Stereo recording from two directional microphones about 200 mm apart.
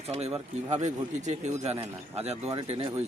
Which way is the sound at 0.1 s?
30° right (ahead or behind).